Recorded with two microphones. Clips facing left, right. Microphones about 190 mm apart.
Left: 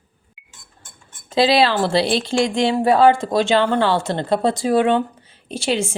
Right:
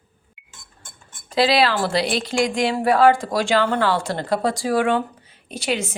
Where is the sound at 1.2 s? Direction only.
25° left (ahead or behind).